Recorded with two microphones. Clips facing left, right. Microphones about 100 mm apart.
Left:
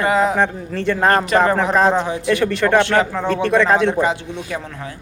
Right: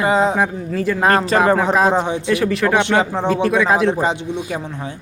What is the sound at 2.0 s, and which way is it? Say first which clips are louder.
Speech: even; 25° right (ahead or behind).